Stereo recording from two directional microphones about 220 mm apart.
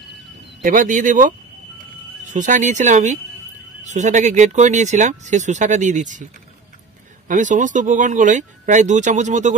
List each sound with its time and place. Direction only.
0.6 s speech: 35° right (ahead or behind)
7.2 s speech: 35° right (ahead or behind)